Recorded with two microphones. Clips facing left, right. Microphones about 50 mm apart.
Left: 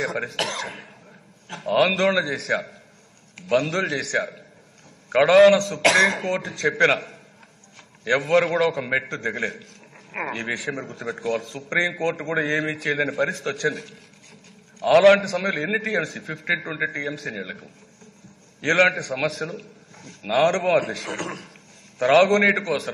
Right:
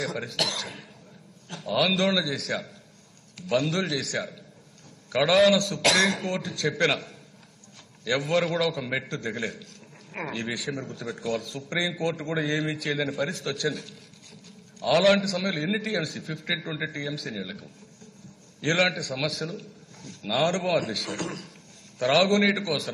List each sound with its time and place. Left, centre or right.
0.2 s a man's voice: left
5.1 s a man's voice: left
8.3 s a man's voice: left
8.5 s a man's voice: left
12.0 s a man's voice: left
12.7 s a man's voice: left
19.2 s a man's voice: left
19.5 s a man's voice: left